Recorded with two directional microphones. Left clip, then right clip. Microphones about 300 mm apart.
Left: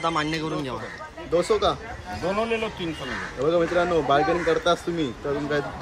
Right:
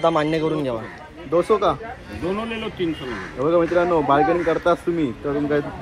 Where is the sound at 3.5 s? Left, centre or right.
Centre.